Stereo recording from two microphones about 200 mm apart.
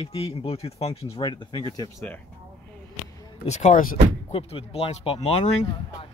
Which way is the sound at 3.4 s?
35° left (ahead or behind).